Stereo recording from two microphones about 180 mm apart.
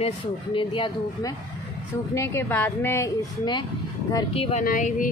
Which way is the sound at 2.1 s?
15° left (ahead or behind).